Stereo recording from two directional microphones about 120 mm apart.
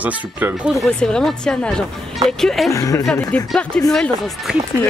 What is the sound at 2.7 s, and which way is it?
Speech, 25° left (ahead or behind).